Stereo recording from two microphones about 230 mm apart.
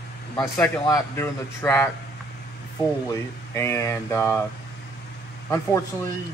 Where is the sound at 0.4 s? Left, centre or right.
Centre.